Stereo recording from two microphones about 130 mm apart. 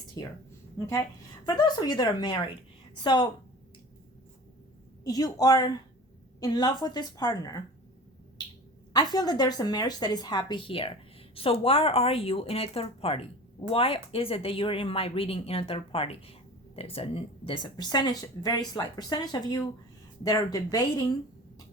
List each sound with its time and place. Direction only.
1.5 s a woman's voice: 35° left (ahead or behind)
5.0 s a woman's voice: 30° left (ahead or behind)
8.9 s a woman's voice: 30° left (ahead or behind)